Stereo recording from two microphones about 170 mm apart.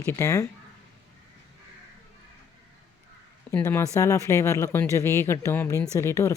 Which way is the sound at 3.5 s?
15° left (ahead or behind).